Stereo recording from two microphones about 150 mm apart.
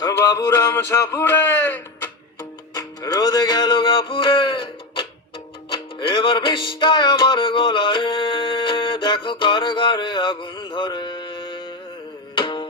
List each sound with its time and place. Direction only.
0.0 s speech: 20° left (ahead or behind)
2.7 s music: 25° left (ahead or behind)